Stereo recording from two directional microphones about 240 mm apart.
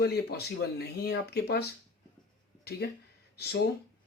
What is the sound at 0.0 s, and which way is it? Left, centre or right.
Speech, left.